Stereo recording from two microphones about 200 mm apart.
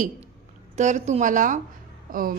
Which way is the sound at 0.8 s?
35° right (ahead or behind).